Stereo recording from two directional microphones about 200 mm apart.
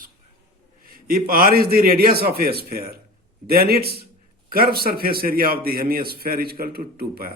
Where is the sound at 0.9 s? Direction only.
45° right (ahead or behind).